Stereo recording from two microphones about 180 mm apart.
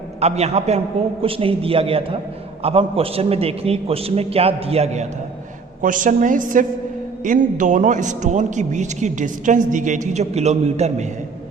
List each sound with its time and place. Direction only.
0.2 s a man's voice: 35° right (ahead or behind)
5.8 s a man's voice: 45° right (ahead or behind)